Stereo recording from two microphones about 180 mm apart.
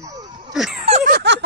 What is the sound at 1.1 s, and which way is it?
Giggle, 70° right (ahead or behind).